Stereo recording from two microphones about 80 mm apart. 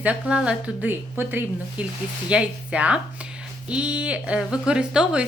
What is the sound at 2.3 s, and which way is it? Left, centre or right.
Speech, centre.